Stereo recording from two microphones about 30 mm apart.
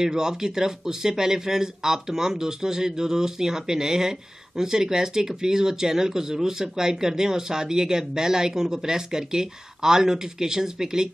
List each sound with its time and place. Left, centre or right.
0.0 s speech: centre